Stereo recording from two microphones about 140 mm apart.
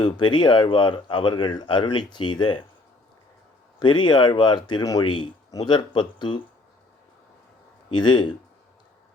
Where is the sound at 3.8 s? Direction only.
35° left (ahead or behind).